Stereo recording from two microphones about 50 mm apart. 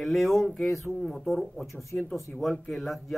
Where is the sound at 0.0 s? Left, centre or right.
Centre.